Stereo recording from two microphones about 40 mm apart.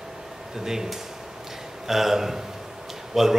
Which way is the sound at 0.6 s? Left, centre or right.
Centre.